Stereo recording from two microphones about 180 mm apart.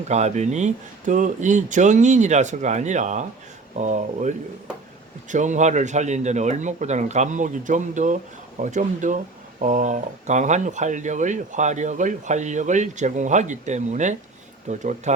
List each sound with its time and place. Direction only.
0.1 s speech: 40° right (ahead or behind)